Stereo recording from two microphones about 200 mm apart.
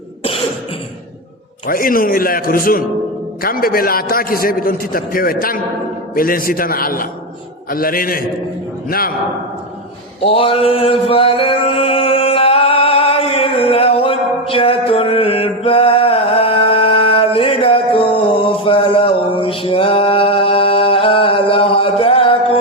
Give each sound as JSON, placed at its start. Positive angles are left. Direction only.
{"t": 1.6, "sound": "a man's voice", "side_deg": 45}
{"t": 10.2, "sound": "male singing", "side_deg": 30}
{"t": 18.6, "sound": "mantra", "side_deg": 25}